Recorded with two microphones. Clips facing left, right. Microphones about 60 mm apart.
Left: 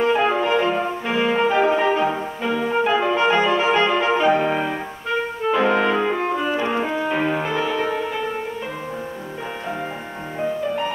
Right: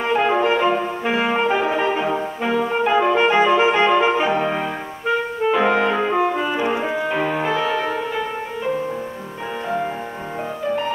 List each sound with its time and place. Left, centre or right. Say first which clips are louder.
0.3 s clarinet: right 2 dB; centre
1.6 s music: left 2 dB; centre
3.1 s music: right 2 dB; centre
4.4 s music: left 1 dB; centre
5.9 s music: right 2 dB; centre